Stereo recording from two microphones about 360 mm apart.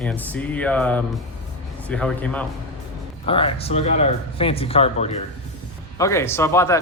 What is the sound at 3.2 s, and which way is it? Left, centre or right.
A man's voice, centre.